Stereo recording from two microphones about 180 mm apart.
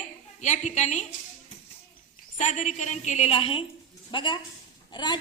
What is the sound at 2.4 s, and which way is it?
A woman's voice, 40° left (ahead or behind).